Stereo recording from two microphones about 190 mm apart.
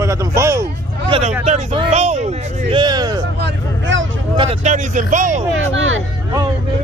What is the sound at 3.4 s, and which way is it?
Vehicle, 75° right (ahead or behind).